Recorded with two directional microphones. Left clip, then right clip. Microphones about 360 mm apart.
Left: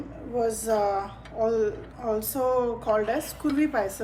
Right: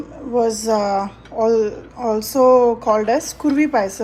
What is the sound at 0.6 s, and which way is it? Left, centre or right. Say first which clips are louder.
Speech: right 6 dB; right.